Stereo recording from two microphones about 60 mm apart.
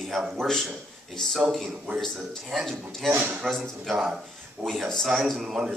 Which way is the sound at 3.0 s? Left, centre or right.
Right.